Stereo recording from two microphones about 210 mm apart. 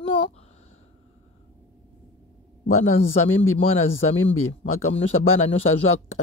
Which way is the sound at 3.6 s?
25° left (ahead or behind).